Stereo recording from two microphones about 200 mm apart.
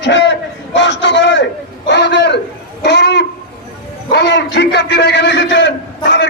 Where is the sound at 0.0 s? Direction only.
60° left (ahead or behind).